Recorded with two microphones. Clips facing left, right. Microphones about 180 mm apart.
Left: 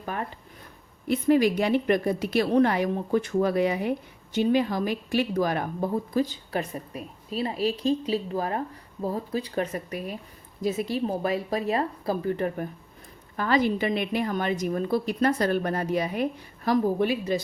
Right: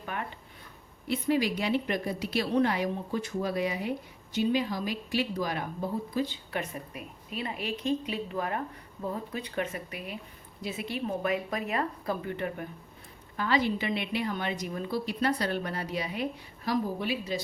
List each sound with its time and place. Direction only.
0.0 s speech: 35° left (ahead or behind)
1.0 s a woman's voice: 50° left (ahead or behind)